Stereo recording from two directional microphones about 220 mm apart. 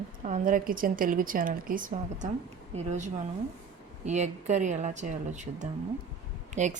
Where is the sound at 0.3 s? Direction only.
35° right (ahead or behind).